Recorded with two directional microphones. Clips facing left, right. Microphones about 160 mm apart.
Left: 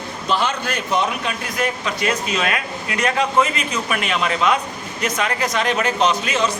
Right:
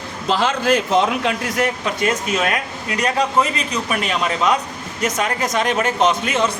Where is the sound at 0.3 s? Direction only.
90° right.